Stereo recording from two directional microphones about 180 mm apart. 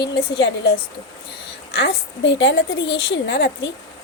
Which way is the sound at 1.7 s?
65° left (ahead or behind).